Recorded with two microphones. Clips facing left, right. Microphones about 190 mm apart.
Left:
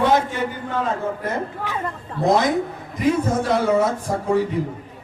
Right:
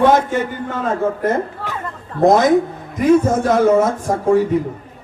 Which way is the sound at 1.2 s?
50° right (ahead or behind).